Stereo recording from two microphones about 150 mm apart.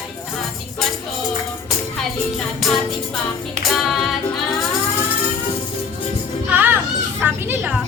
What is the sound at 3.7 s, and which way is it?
Music, centre (ahead or behind).